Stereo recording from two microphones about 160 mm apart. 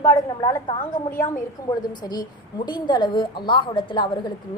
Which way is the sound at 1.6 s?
60° left (ahead or behind).